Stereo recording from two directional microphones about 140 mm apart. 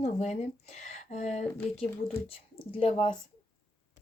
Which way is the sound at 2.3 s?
45° left (ahead or behind).